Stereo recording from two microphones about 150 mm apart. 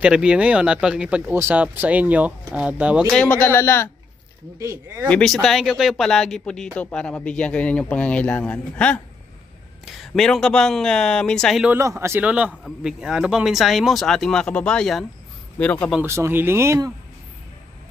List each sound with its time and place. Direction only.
0.0 s speech: 5° right (ahead or behind)
3.1 s speech: 5° left (ahead or behind)
4.6 s speech: 20° right (ahead or behind)
5.0 s a man's voice: 5° left (ahead or behind)
11.7 s a man's voice: 20° right (ahead or behind); by 15.9 s 10° left (ahead or behind)
15.9 s speech: 15° right (ahead or behind)